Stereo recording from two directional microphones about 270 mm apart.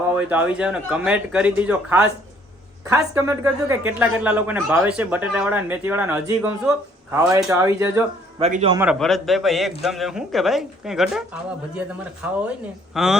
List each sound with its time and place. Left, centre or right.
0.1 s a man's voice: centre
8.4 s a man's voice: right
8.8 s a man's voice: centre
12.4 s a man's voice: centre